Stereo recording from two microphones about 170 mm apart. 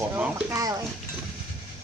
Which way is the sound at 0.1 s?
10° right (ahead or behind).